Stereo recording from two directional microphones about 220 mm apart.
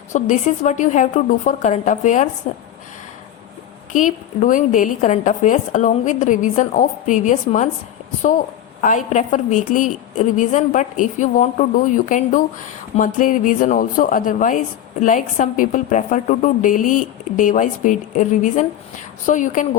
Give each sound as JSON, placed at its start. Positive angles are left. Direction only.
{"t": 0.1, "sound": "a woman's voice", "side_deg": 30}
{"t": 3.9, "sound": "a woman's voice", "side_deg": 35}
{"t": 8.8, "sound": "a woman's voice", "side_deg": 35}